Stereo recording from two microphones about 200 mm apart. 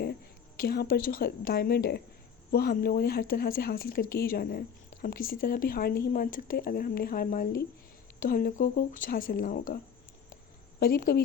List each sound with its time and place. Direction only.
0.0 s a woman's voice: 50° left (ahead or behind)
10.8 s speech: 50° left (ahead or behind)